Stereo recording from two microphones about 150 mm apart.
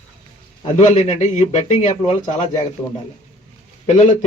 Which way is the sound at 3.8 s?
50° left (ahead or behind).